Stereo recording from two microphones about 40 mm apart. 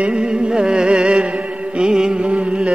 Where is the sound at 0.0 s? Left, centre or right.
Right.